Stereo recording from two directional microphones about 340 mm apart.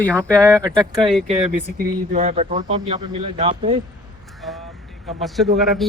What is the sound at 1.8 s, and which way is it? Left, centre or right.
Speech, right.